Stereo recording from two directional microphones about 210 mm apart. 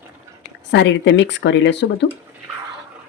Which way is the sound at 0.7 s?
55° left (ahead or behind).